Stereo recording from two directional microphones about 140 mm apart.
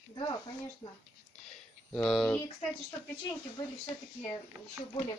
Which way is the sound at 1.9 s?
Centre (ahead or behind).